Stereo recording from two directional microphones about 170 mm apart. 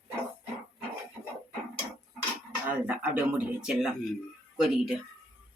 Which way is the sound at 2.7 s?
10° right (ahead or behind).